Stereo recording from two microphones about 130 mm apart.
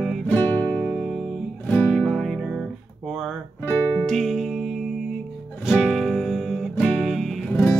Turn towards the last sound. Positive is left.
turn(degrees=5)  # may be behind; listen again after turning